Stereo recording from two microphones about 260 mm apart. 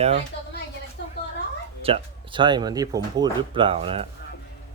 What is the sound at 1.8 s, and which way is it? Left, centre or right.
Speech, centre.